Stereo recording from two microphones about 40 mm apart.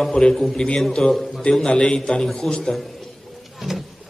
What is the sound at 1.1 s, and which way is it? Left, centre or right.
Speech, centre.